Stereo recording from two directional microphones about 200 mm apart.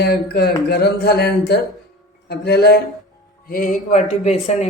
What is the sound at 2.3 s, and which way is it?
Music, 55° left (ahead or behind).